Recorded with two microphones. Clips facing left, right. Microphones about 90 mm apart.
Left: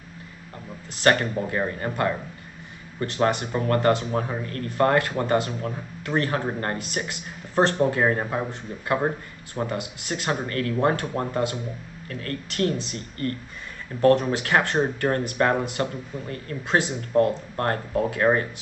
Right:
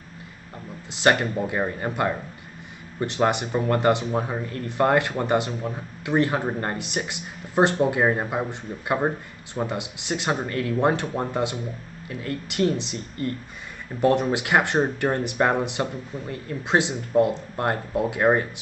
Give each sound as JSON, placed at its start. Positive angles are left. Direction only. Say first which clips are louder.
{"t": 0.9, "sound": "speech", "louder": "even", "side_deg": -15}